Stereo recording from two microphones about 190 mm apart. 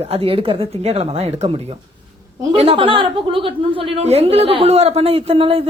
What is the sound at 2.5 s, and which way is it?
Speech, 30° right (ahead or behind).